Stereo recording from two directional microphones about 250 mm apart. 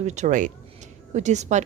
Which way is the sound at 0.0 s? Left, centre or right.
Right.